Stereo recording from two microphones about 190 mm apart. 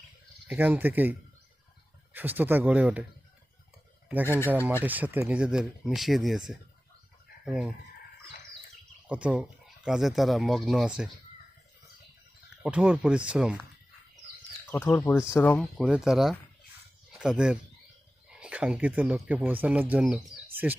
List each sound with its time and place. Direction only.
0.4 s speech: 10° right (ahead or behind)
2.1 s speech: 10° right (ahead or behind)
4.4 s speech: 10° right (ahead or behind)
7.4 s speech: 5° right (ahead or behind)
9.0 s speech: 5° right (ahead or behind)
12.6 s speech: 5° right (ahead or behind)
14.7 s speech: 15° left (ahead or behind); by 20.7 s 5° right (ahead or behind)